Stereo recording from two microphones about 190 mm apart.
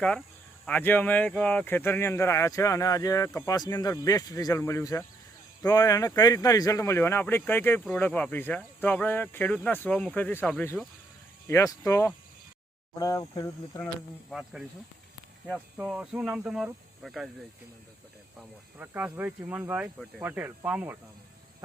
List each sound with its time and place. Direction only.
0.6 s speech: 10° left (ahead or behind)
14.3 s speech: centre (ahead or behind)
18.3 s speech: 10° right (ahead or behind)